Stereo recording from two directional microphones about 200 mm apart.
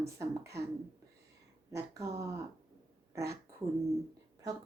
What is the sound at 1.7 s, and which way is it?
Speech, 15° right (ahead or behind).